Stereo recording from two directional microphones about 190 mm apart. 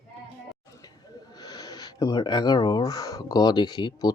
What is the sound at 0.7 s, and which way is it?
Speech, 20° left (ahead or behind).